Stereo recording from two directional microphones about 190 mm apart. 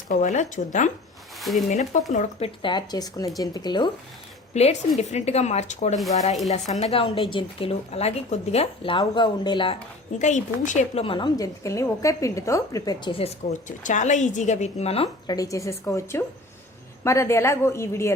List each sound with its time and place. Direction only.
0.1 s a woman's voice: 40° left (ahead or behind)
1.4 s speech: centre (ahead or behind)
1.7 s a woman's voice: 40° left (ahead or behind)
2.6 s speech: 25° left (ahead or behind)
4.5 s a woman's voice: 35° left (ahead or behind)
10.2 s a woman's voice: 40° left (ahead or behind)
15.3 s a woman's voice: 15° left (ahead or behind)